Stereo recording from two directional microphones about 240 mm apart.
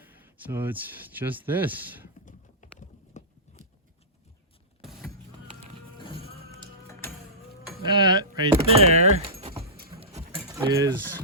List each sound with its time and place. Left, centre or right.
0.0 s speech: centre
2.2 s clip-clop: left
4.8 s a sound: centre
6.0 s music: left
6.8 s music: centre
7.9 s speech: centre
10.0 s clip-clop: right
10.5 s speech: centre